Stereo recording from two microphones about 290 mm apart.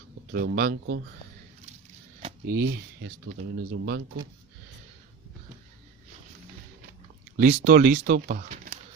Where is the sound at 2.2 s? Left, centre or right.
Right.